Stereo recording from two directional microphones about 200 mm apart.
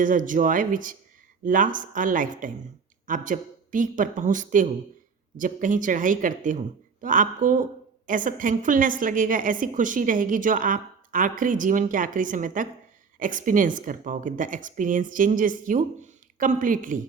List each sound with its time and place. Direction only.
0.0 s a woman's voice: 40° right (ahead or behind)